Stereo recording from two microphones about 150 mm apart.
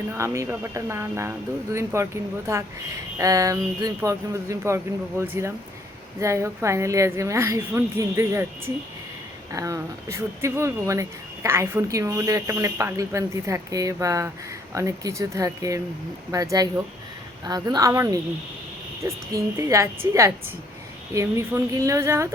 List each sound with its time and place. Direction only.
0.1 s a woman's voice: 20° right (ahead or behind)
3.2 s a woman's voice: 20° right (ahead or behind)
9.5 s a woman's voice: 20° right (ahead or behind)